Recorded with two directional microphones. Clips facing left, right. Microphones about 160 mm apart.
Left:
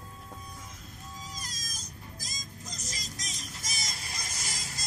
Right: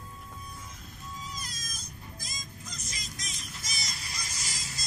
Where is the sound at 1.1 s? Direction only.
40° left (ahead or behind).